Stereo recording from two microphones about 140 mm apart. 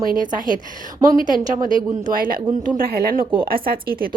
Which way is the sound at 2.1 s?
90° right.